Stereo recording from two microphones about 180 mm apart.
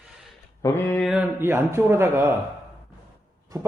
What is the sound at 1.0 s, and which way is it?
Speech, 5° right (ahead or behind).